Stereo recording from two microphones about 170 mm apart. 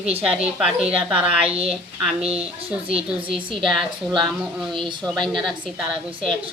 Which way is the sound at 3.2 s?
30° right (ahead or behind).